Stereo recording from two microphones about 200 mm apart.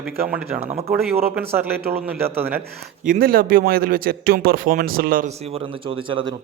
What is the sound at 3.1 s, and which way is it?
A man's voice, 45° right (ahead or behind).